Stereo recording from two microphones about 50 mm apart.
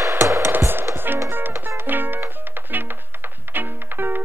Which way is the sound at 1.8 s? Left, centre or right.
Right.